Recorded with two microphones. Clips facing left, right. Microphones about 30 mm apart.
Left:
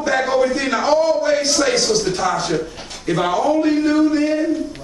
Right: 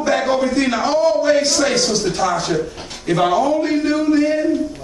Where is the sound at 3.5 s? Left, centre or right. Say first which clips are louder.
Left 1 dB; centre.